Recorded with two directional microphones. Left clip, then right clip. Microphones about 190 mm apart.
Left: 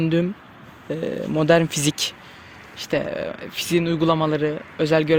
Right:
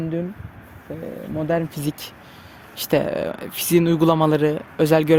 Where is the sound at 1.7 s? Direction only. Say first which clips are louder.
Left 6 dB; 10° left (ahead or behind).